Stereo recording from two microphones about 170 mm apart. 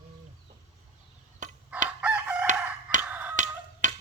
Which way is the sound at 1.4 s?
45° right (ahead or behind).